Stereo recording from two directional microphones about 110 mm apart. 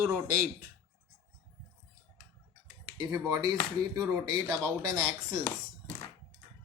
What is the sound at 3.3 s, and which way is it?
Speech, 35° right (ahead or behind).